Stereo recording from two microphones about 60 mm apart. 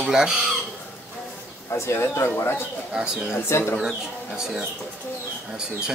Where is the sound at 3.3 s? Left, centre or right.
Left.